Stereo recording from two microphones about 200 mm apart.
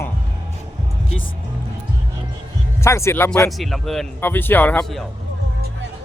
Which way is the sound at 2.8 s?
15° left (ahead or behind).